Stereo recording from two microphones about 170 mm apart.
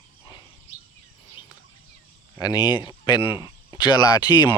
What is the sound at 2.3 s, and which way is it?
Speech, 25° left (ahead or behind).